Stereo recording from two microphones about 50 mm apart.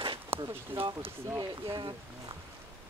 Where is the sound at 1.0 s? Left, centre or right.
Right.